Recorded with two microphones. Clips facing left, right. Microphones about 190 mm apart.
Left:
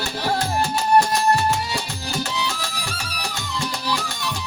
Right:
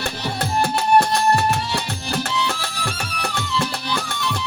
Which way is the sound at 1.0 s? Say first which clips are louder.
Even; 60° right (ahead or behind).